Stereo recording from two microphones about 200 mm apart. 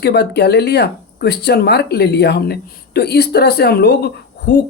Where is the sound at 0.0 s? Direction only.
55° left (ahead or behind).